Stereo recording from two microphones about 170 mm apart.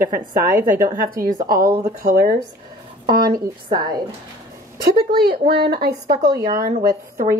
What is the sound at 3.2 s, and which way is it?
Speech, 25° right (ahead or behind).